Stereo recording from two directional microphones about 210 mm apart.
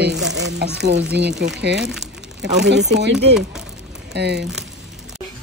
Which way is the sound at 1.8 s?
Centre (ahead or behind).